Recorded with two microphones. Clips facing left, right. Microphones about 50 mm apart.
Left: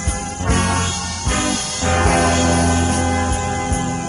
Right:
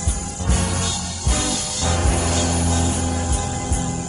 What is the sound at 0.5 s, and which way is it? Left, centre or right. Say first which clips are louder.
Music: left 5 dB; left.